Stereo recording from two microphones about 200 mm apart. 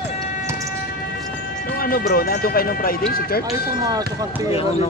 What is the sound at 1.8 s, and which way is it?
Speech, 45° left (ahead or behind).